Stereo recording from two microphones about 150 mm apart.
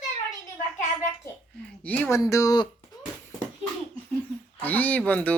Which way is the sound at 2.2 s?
20° left (ahead or behind).